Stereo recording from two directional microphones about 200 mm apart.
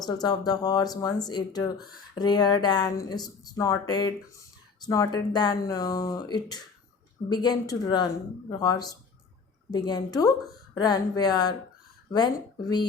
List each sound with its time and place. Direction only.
0.0 s speech: 20° left (ahead or behind)